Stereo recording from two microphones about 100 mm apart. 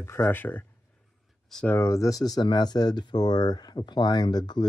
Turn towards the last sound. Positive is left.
turn(degrees=45)  # may be behind; listen again after turning